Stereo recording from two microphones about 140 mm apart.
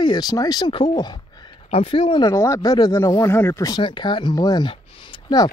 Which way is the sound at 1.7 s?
40° left (ahead or behind).